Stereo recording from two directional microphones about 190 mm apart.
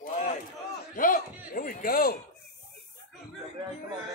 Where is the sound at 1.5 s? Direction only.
45° left (ahead or behind).